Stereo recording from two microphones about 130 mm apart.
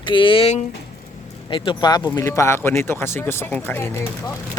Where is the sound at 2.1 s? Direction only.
25° left (ahead or behind).